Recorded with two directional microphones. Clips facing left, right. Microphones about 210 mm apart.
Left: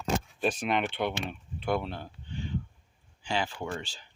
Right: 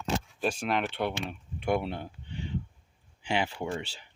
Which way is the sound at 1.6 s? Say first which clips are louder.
Right 2 dB; 20° right (ahead or behind).